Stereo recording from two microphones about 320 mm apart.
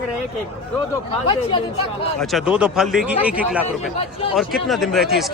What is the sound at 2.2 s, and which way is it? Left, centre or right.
Speech, centre.